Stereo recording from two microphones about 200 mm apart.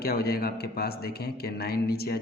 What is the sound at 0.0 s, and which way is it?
Speech, 50° left (ahead or behind).